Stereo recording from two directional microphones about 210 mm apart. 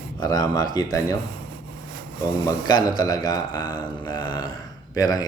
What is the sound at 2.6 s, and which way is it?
A man's voice, 20° left (ahead or behind).